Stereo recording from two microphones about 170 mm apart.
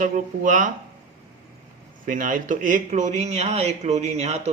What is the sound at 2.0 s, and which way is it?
Speech, 50° right (ahead or behind).